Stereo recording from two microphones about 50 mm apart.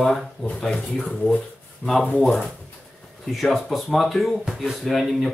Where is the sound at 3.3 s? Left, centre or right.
Centre.